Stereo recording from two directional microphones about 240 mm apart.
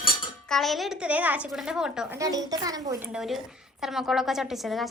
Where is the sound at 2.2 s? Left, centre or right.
Centre.